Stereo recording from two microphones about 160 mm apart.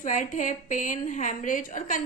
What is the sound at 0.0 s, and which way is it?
A woman's voice, 55° left (ahead or behind).